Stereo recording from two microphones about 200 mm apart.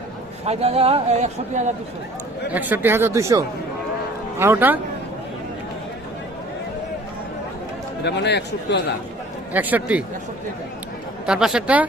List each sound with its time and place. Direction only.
0.4 s speech: 30° right (ahead or behind)
2.5 s speech: 10° right (ahead or behind)
8.0 s speech: 55° left (ahead or behind)
9.5 s speech: 10° right (ahead or behind)
11.3 s speech: 5° right (ahead or behind)